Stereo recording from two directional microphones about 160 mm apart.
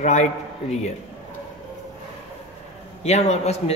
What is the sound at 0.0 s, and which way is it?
Speech, 45° left (ahead or behind).